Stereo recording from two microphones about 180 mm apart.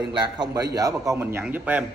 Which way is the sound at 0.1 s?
25° right (ahead or behind).